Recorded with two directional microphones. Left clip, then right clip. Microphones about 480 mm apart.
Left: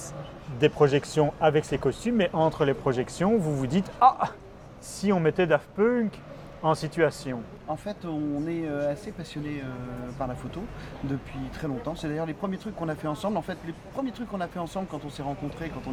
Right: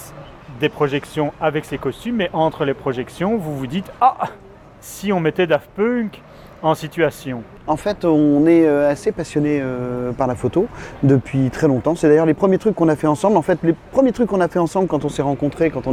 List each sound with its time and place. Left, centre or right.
0.6 s speech: centre
7.7 s speech: right
11.6 s speech: right